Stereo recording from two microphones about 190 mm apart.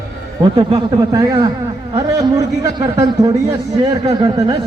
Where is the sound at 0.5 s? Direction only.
25° right (ahead or behind).